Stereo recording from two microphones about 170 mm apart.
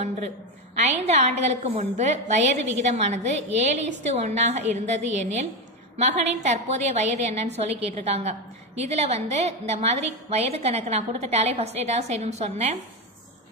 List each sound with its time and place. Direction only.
1.0 s a woman's voice: 40° right (ahead or behind)